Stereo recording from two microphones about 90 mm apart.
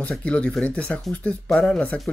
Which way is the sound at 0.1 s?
10° left (ahead or behind).